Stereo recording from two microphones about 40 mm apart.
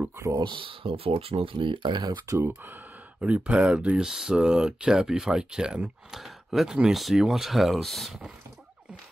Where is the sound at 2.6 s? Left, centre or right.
Right.